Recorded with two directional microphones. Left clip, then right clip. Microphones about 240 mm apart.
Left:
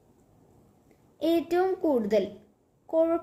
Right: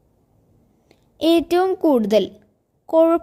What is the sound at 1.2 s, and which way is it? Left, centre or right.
A woman's voice, right.